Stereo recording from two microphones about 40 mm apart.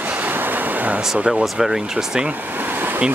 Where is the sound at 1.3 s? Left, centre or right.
Centre.